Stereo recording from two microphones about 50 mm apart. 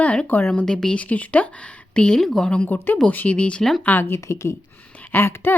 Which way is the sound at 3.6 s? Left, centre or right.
Centre.